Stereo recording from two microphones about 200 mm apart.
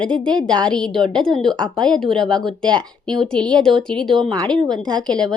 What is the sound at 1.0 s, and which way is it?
Speech, 25° right (ahead or behind).